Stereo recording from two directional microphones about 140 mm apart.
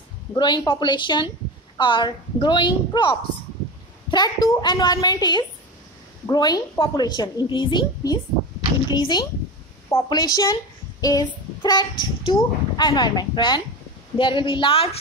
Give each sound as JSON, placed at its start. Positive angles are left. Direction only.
{"t": 0.3, "sound": "a woman's voice", "side_deg": 35}